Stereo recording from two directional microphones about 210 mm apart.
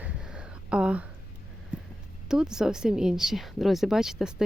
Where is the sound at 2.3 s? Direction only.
5° right (ahead or behind).